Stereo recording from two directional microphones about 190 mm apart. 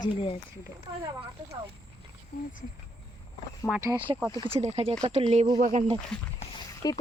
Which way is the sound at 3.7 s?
15° right (ahead or behind).